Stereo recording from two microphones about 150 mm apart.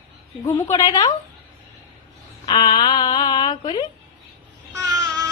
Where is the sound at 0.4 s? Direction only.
20° left (ahead or behind).